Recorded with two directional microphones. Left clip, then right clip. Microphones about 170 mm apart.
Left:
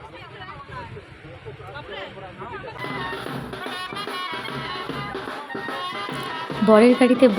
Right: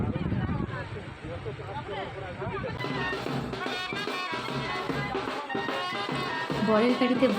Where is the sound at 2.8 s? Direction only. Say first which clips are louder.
Left 3 dB; 10° left (ahead or behind).